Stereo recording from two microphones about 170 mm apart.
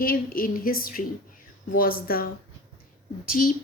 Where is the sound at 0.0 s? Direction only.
60° left (ahead or behind).